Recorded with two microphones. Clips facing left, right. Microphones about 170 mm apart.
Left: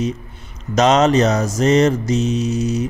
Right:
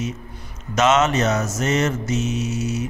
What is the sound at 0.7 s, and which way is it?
Mantra, 35° left (ahead or behind).